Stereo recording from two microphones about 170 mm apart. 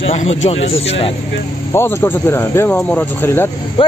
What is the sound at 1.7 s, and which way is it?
Speech, 15° left (ahead or behind).